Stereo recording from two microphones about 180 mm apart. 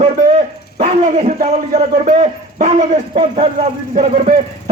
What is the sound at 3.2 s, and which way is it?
Speech, 35° right (ahead or behind).